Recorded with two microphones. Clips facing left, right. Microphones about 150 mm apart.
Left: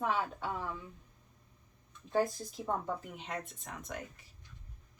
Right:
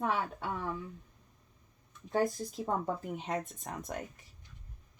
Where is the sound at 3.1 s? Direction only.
40° right (ahead or behind).